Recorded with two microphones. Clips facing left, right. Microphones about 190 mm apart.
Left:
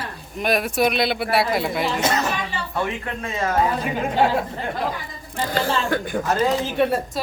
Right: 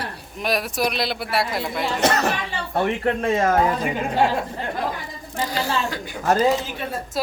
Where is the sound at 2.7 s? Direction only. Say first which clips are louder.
Right 7 dB; 50° right (ahead or behind).